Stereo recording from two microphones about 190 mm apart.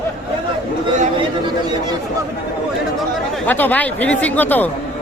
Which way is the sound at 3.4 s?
10° left (ahead or behind).